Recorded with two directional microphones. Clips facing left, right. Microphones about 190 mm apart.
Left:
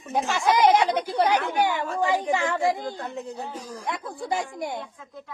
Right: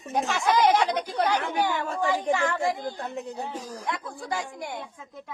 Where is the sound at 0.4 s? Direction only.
15° left (ahead or behind).